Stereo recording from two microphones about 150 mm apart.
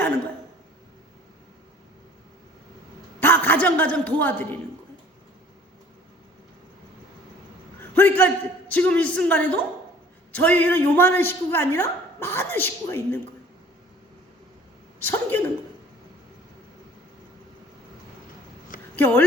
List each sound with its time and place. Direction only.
3.2 s a man's voice: 15° left (ahead or behind)
7.9 s a woman's voice: 15° left (ahead or behind)
15.0 s a woman's voice: 15° left (ahead or behind)
18.9 s a woman's voice: 15° left (ahead or behind)